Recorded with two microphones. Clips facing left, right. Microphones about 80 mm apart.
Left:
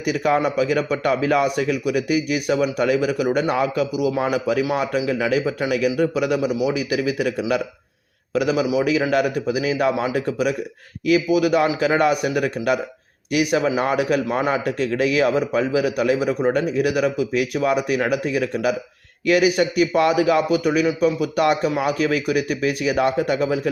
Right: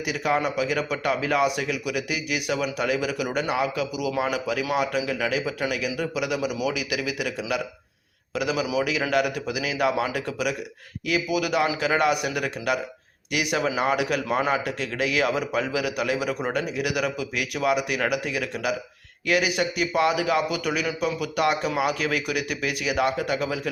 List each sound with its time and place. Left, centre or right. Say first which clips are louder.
0.0 s a man's voice: left 5 dB; left